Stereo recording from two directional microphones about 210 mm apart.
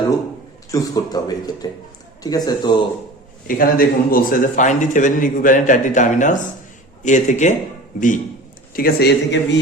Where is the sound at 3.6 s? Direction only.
45° left (ahead or behind).